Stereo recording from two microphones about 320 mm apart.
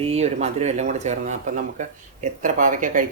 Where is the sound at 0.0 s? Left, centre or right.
Centre.